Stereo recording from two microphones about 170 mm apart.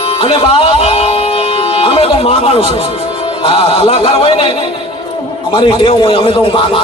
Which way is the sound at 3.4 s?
35° left (ahead or behind).